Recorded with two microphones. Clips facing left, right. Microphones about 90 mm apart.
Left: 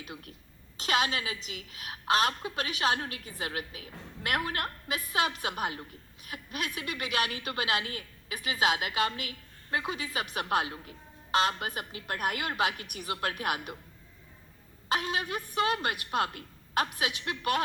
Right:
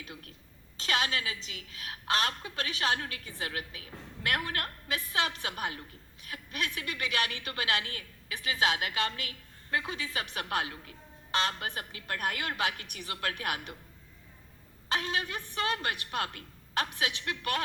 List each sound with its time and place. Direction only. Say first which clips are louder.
0.0 s a woman's voice: left 2 dB; 20° left (ahead or behind)
14.8 s a woman's voice: left 2 dB; 20° left (ahead or behind)